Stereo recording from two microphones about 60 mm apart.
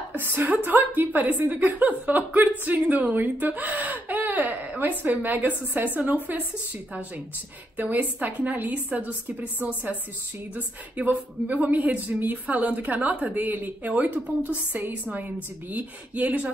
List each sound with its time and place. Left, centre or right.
0.1 s a woman's voice: right
7.7 s a woman's voice: right